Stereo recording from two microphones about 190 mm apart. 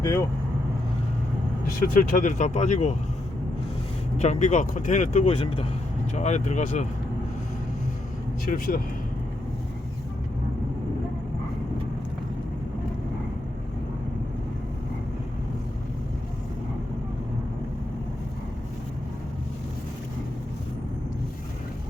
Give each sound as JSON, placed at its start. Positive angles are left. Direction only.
{"t": 0.0, "sound": "speech", "side_deg": 15}
{"t": 1.8, "sound": "speech", "side_deg": 45}
{"t": 4.2, "sound": "speech", "side_deg": 40}
{"t": 8.4, "sound": "speech", "side_deg": 45}